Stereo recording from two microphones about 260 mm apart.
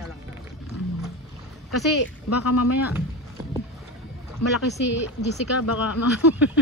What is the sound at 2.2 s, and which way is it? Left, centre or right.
Speech, left.